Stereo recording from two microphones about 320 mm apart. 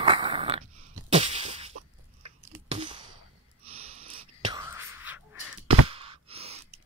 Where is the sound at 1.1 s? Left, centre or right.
Centre.